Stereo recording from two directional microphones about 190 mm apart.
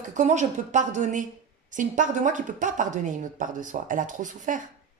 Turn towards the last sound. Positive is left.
turn(degrees=-45)  # may be behind; listen again after turning